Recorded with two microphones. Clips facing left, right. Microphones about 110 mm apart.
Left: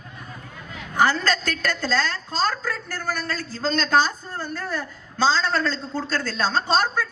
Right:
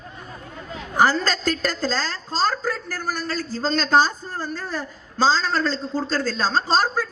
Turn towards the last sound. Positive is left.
turn(degrees=-35)  # may be behind; listen again after turning